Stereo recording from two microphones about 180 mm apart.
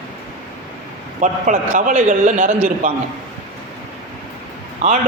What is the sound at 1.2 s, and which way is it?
A man's voice, 45° right (ahead or behind).